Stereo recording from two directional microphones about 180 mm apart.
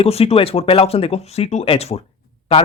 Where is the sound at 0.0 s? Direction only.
35° left (ahead or behind).